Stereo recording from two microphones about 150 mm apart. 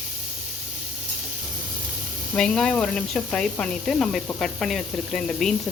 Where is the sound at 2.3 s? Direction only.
5° left (ahead or behind).